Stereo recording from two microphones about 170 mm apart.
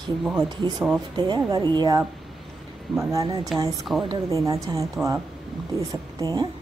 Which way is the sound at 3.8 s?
Centre (ahead or behind).